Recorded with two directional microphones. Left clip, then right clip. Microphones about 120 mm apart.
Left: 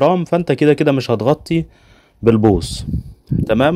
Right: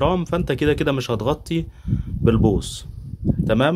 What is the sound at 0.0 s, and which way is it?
Speech, 35° left (ahead or behind).